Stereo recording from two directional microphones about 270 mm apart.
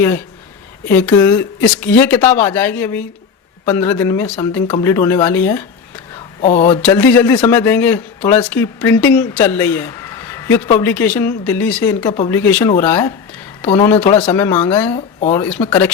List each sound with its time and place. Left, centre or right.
0.9 s speech: centre
6.8 s speech: centre
15.4 s speech: centre